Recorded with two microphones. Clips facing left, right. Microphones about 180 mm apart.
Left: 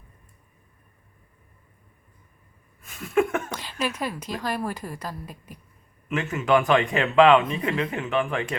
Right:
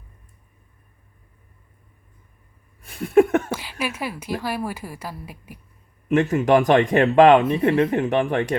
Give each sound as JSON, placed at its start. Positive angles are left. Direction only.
{"t": 2.8, "sound": "a sound", "side_deg": -35}
{"t": 3.5, "sound": "a woman's voice", "side_deg": -10}
{"t": 6.1, "sound": "speech", "side_deg": -35}